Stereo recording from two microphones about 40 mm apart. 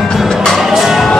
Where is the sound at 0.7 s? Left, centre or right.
Centre.